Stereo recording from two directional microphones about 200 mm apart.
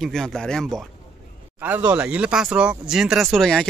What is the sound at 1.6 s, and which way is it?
Speech, 10° right (ahead or behind).